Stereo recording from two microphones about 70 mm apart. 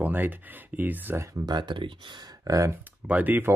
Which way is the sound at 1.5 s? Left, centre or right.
Right.